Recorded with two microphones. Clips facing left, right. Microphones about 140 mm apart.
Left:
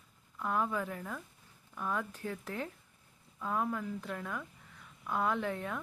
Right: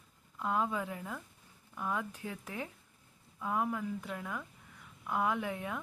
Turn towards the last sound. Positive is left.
turn(degrees=-15)  # may be behind; listen again after turning